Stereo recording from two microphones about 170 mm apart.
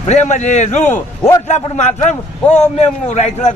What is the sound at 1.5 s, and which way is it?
A man's voice, 40° left (ahead or behind).